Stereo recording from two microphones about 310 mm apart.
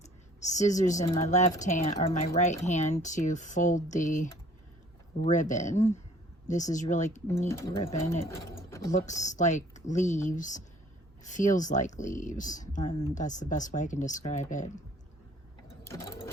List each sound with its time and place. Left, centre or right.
0.0 s a sound: left
1.1 s speech: left
7.3 s speech: centre
8.9 s speech: left
15.9 s sewing machine: centre